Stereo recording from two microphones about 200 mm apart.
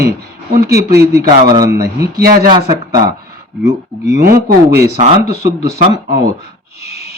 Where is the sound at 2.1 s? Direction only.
50° right (ahead or behind).